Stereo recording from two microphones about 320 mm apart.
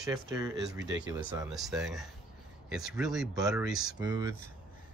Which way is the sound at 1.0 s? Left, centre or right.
Centre.